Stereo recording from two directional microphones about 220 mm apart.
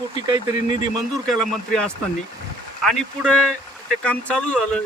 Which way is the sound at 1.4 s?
5° left (ahead or behind).